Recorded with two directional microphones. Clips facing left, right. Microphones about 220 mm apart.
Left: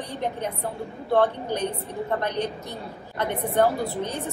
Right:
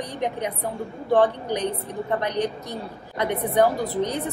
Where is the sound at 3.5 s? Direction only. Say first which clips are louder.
Right 2 dB; 15° right (ahead or behind).